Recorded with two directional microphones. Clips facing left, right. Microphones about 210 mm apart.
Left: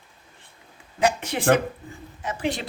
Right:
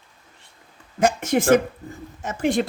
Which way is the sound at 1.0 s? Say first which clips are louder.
Right 3 dB; 45° right (ahead or behind).